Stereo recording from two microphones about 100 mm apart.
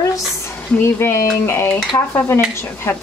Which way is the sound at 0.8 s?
25° left (ahead or behind).